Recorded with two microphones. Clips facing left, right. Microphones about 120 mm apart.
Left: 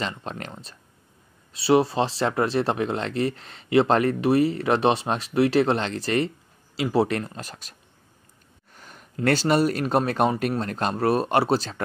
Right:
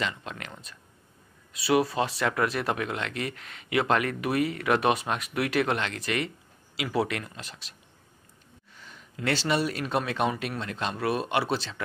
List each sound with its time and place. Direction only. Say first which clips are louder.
0.0 s speech: left 2 dB; 35° left (ahead or behind)
8.7 s a sound: left 3 dB; 50° left (ahead or behind)
9.1 s speech: left 6 dB; 45° left (ahead or behind)